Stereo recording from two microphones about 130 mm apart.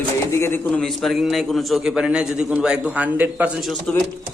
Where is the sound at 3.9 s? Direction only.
10° left (ahead or behind).